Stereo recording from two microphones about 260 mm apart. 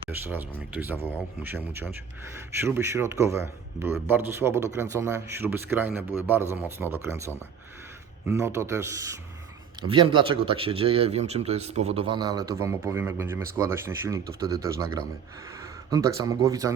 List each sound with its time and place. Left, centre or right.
0.1 s a man's voice: centre